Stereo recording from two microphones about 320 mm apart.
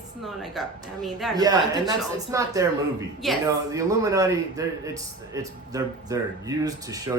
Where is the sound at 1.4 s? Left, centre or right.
Centre.